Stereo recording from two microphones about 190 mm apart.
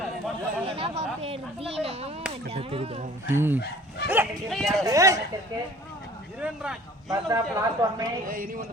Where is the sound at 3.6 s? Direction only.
60° left (ahead or behind).